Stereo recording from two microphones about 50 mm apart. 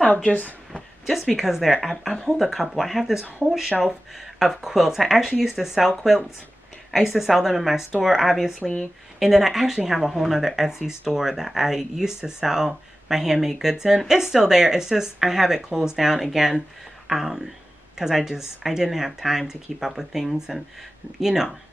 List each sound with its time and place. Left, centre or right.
0.0 s a sound: centre
0.3 s speech: left
1.0 s speech: centre
9.2 s speech: centre